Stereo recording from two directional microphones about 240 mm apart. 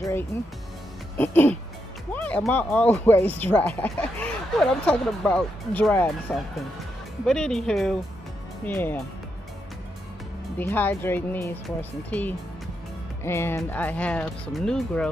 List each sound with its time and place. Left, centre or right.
1.1 s speech: centre
10.6 s speech: centre